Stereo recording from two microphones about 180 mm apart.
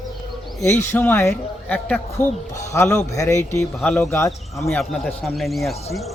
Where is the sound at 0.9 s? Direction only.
10° left (ahead or behind).